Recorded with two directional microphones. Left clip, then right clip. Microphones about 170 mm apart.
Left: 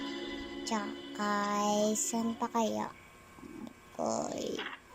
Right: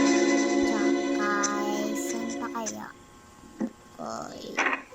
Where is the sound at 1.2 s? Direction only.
20° left (ahead or behind).